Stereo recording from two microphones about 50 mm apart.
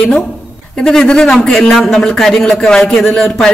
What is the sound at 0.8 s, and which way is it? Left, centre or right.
Speech, centre.